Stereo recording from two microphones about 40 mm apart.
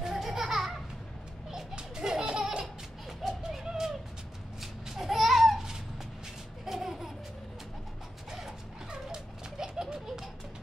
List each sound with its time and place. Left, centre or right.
0.0 s children playing: centre
1.8 s laughter: centre
2.6 s a sound: centre
4.6 s babbling: centre
6.6 s laughter: centre
8.3 s mechanisms: centre
8.9 s a sound: centre